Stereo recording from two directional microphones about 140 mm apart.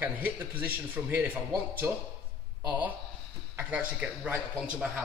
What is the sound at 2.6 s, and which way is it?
A man's voice, 10° right (ahead or behind).